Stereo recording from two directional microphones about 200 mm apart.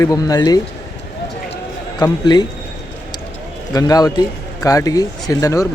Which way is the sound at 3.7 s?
20° left (ahead or behind).